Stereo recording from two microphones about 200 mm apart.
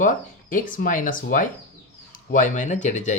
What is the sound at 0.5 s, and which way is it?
Speech, 40° left (ahead or behind).